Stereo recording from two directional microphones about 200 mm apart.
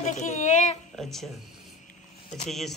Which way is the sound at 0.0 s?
35° left (ahead or behind).